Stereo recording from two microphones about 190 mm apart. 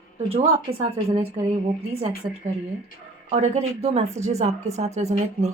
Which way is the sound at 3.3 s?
35° right (ahead or behind).